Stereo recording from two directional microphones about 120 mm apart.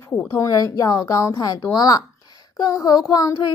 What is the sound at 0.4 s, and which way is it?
A child's voice, 30° left (ahead or behind).